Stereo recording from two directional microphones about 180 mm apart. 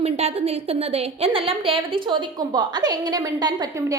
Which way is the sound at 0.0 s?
35° right (ahead or behind).